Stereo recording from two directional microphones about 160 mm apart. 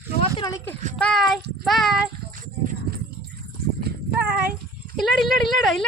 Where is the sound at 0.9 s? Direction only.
5° left (ahead or behind).